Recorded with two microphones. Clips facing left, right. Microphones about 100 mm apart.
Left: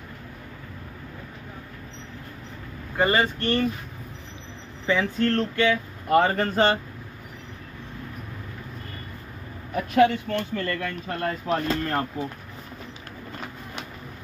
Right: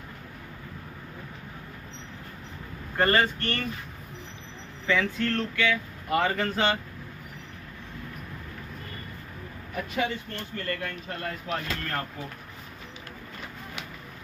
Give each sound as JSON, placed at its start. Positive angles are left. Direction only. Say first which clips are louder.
{"t": 3.0, "sound": "speech", "louder": "left 1 dB", "side_deg": 10}
{"t": 3.3, "sound": "speech", "louder": "left 7 dB", "side_deg": 20}
{"t": 4.8, "sound": "speech", "louder": "left 3 dB", "side_deg": 30}
{"t": 6.0, "sound": "speech", "louder": "left 6 dB", "side_deg": 45}
{"t": 9.9, "sound": "speech", "louder": "left 12 dB", "side_deg": 65}
{"t": 11.4, "sound": "speech", "louder": "left 8 dB", "side_deg": 35}
{"t": 11.8, "sound": "speech", "louder": "left 6 dB", "side_deg": 25}